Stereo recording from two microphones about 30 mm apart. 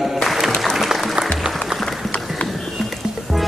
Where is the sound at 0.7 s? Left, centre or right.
Centre.